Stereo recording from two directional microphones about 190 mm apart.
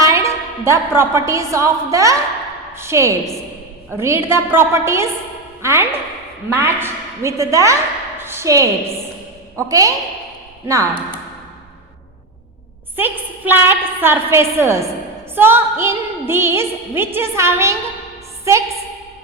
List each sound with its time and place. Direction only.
0.0 s a woman's voice: 15° right (ahead or behind)
8.2 s a sound: 15° right (ahead or behind)
9.6 s a woman's voice: 20° right (ahead or behind)
13.0 s a woman's voice: 10° right (ahead or behind)